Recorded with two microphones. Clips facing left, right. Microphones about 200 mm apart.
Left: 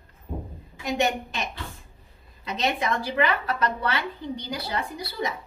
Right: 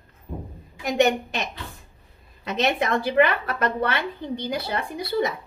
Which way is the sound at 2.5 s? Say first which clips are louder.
Right 3 dB; 55° right (ahead or behind).